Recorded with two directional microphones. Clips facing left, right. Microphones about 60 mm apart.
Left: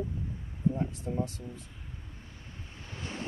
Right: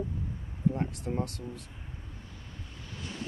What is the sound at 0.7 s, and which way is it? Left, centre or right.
Speech, right.